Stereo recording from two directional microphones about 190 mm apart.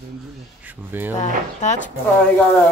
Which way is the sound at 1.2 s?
40° left (ahead or behind).